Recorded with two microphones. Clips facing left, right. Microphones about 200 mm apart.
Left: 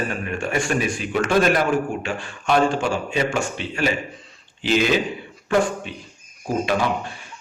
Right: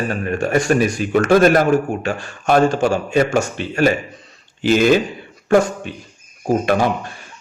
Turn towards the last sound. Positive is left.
turn(degrees=-50)  # may be behind; listen again after turning